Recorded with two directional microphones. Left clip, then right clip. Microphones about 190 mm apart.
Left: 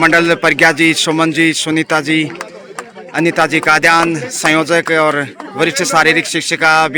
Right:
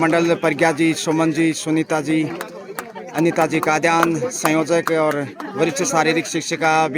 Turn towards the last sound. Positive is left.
turn(degrees=0)  # may be behind; listen again after turning